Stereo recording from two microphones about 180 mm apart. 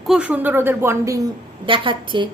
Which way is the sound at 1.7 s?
30° right (ahead or behind).